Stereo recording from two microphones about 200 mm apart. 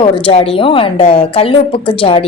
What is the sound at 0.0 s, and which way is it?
A woman's voice, 30° left (ahead or behind).